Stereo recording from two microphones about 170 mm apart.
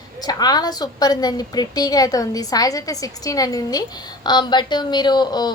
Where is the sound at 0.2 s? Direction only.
25° left (ahead or behind).